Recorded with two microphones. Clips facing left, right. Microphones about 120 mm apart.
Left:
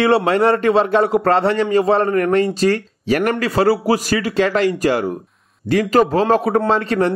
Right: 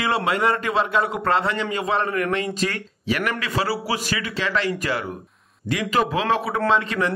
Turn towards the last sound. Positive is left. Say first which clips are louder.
# left 4 dB
turn(degrees=40)  # may be behind; listen again after turning